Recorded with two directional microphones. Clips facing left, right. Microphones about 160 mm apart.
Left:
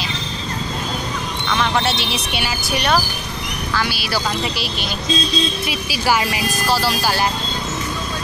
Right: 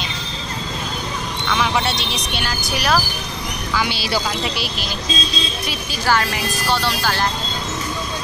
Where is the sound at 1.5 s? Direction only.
Centre (ahead or behind).